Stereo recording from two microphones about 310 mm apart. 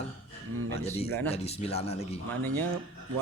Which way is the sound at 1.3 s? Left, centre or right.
Centre.